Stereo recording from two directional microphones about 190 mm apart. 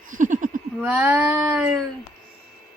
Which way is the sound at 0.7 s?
5° right (ahead or behind).